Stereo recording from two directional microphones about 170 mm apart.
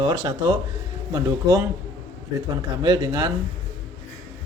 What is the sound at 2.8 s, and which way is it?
Speech, 25° right (ahead or behind).